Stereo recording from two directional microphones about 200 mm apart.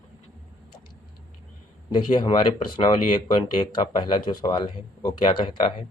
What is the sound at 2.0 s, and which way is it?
Speech, 20° left (ahead or behind).